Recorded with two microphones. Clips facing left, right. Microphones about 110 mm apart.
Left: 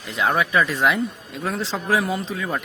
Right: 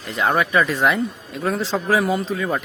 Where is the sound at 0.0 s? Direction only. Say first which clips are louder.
Right 2 dB; centre (ahead or behind).